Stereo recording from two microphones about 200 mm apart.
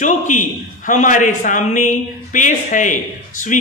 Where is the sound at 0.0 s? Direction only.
40° left (ahead or behind).